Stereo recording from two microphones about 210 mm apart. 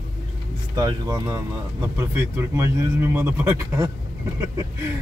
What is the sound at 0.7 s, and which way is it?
Speech, 20° right (ahead or behind).